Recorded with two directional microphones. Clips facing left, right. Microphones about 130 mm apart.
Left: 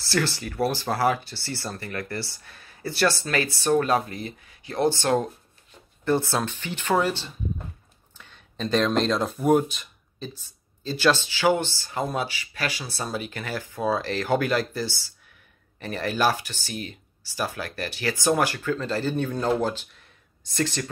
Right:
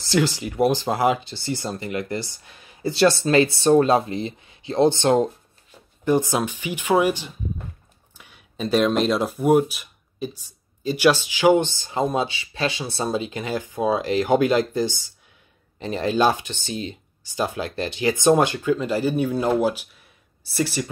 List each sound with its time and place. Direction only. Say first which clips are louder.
0.0 s speech: right 5 dB; 15° right (ahead or behind)